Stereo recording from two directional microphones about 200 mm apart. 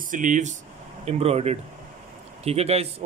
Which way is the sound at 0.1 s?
40° right (ahead or behind).